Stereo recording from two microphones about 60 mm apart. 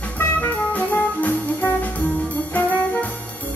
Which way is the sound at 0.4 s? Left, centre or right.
Left.